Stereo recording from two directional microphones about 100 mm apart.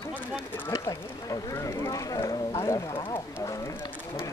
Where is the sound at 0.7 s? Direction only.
35° left (ahead or behind).